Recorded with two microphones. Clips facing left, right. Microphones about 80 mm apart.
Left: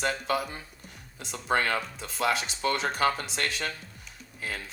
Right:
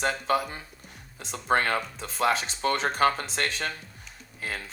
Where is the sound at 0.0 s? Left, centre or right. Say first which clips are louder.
Right 2 dB; right.